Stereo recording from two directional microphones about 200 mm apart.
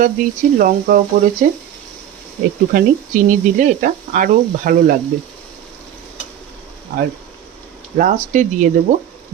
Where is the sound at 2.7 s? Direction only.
40° right (ahead or behind).